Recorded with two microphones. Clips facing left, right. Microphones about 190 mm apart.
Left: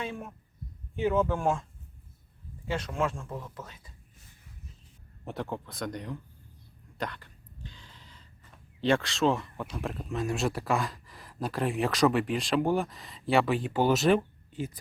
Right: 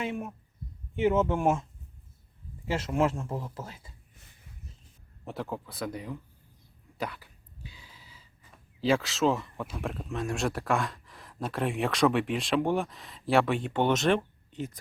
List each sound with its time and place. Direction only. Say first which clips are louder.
0.0 s speech: right 3 dB; 25° right (ahead or behind)
2.6 s speech: right 3 dB; 25° right (ahead or behind)
5.2 s speech: even; centre (ahead or behind)